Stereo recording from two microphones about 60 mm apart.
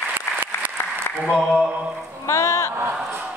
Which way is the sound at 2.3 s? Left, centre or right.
Left.